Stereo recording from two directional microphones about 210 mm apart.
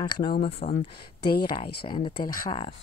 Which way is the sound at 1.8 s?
25° left (ahead or behind).